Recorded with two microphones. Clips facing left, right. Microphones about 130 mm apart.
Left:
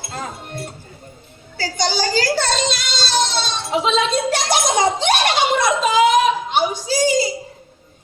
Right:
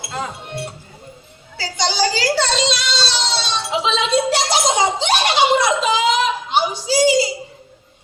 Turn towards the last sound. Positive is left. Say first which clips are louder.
# right 2 dB
turn(degrees=50)  # may be behind; listen again after turning